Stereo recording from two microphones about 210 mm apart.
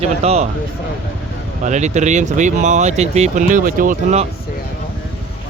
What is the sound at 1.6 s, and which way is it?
Speech, 35° right (ahead or behind).